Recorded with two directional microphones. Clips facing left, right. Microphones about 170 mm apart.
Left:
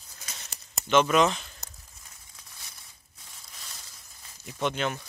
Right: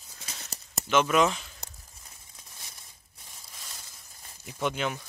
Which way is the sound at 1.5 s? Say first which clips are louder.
Right 1 dB; 30° right (ahead or behind).